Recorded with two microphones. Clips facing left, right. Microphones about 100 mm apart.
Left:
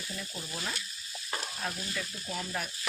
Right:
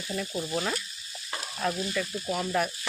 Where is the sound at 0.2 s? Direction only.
70° right (ahead or behind).